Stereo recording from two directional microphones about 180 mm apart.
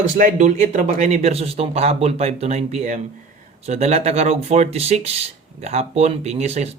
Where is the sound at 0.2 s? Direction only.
40° right (ahead or behind).